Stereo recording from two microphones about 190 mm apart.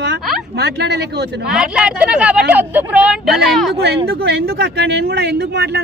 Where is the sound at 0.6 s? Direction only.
60° right (ahead or behind).